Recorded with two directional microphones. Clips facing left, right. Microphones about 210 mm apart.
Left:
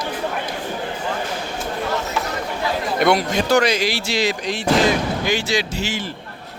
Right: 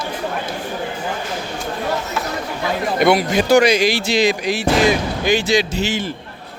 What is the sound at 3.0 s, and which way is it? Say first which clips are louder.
Speech: right 3 dB; 5° right (ahead or behind).